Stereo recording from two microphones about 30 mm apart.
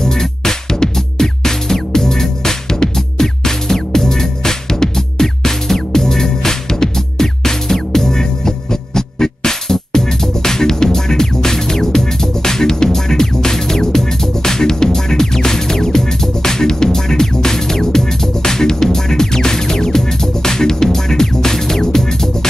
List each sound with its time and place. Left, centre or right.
0.0 s music: centre